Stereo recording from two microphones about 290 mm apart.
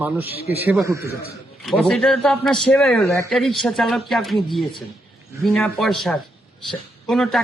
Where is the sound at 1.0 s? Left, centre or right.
Left.